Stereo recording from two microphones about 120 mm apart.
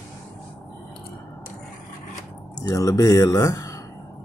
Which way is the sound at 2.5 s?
30° left (ahead or behind).